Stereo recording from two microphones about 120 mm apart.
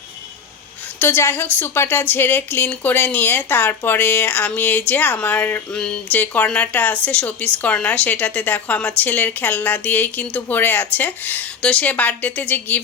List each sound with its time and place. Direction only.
0.9 s speech: 20° left (ahead or behind)